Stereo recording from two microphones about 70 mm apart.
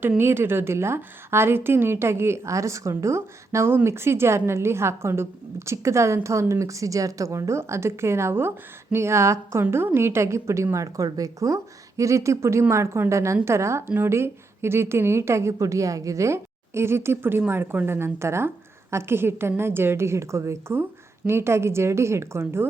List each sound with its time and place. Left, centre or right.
0.2 s a woman's voice: right